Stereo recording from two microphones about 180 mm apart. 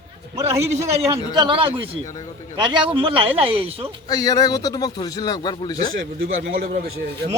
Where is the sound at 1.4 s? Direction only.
30° right (ahead or behind).